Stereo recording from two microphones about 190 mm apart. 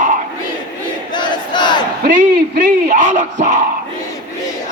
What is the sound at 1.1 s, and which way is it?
Battle cry, 25° left (ahead or behind).